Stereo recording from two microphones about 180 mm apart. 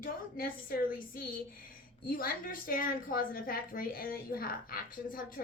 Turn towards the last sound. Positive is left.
turn(degrees=50)  # may be behind; listen again after turning